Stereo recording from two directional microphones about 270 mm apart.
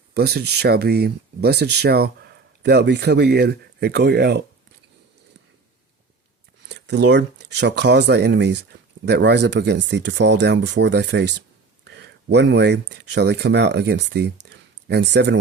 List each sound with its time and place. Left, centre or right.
0.1 s speech: right
6.6 s speech: right